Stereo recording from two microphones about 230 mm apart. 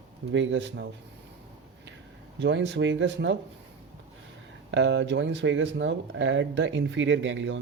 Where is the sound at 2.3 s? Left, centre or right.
Right.